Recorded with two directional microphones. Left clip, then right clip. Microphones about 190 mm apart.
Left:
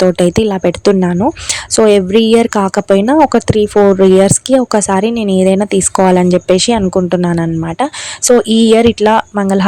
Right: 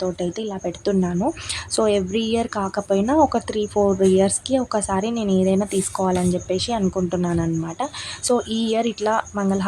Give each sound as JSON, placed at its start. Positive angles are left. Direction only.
{"t": 0.0, "sound": "a woman's voice", "side_deg": 45}